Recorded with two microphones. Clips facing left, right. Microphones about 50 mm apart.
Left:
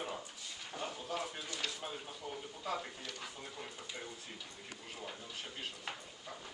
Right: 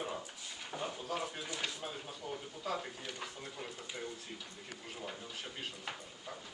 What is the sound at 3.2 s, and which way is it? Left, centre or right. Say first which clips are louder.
Speech: right 2 dB; centre.